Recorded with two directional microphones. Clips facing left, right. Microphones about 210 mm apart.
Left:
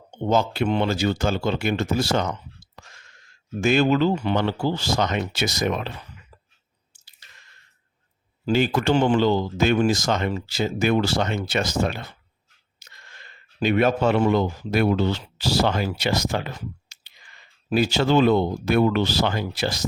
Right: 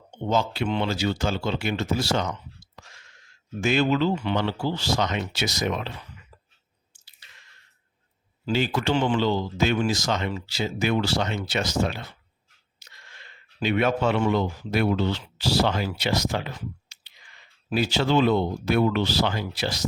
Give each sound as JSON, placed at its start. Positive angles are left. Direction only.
{"t": 0.3, "sound": "speech", "side_deg": 50}
{"t": 2.7, "sound": "a sound", "side_deg": 50}
{"t": 3.6, "sound": "speech", "side_deg": 45}
{"t": 6.9, "sound": "chewing", "side_deg": 45}
{"t": 8.4, "sound": "speech", "side_deg": 50}